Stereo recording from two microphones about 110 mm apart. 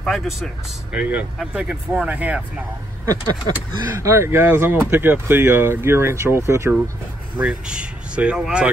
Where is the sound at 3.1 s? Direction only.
35° right (ahead or behind).